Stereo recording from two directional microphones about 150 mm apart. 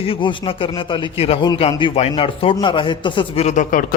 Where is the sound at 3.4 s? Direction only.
60° left (ahead or behind).